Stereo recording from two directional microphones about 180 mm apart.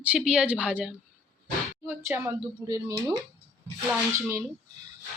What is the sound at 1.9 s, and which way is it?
Speech, 15° right (ahead or behind).